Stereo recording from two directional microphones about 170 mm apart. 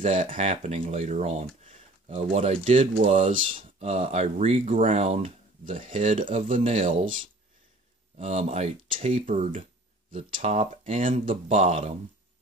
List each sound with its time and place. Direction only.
0.0 s speech: 40° right (ahead or behind)
8.2 s speech: 40° right (ahead or behind)